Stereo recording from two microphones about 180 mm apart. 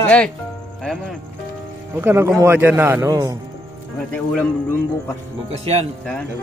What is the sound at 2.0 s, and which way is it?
Speech, 10° right (ahead or behind).